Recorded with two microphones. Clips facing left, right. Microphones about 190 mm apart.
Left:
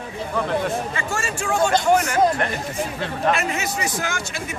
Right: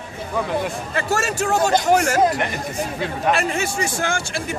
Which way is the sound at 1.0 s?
40° right (ahead or behind).